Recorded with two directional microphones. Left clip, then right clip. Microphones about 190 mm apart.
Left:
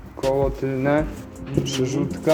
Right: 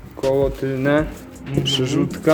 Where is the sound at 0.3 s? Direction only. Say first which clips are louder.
Right 3 dB; 30° right (ahead or behind).